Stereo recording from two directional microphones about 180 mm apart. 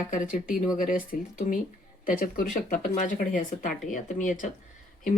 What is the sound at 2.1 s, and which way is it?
Speech, 50° left (ahead or behind).